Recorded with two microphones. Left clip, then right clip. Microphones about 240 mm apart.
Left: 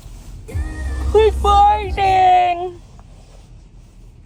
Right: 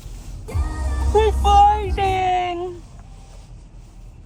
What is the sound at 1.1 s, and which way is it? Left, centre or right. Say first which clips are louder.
Speech: left 3 dB; left.